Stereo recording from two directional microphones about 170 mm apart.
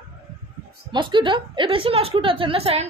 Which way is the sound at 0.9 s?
30° right (ahead or behind).